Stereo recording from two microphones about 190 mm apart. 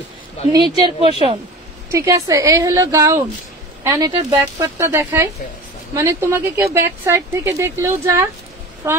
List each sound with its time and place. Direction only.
0.8 s a woman's voice: 25° right (ahead or behind)
1.9 s speech: 15° right (ahead or behind)